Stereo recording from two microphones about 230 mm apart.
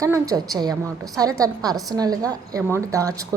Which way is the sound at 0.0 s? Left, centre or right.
Centre.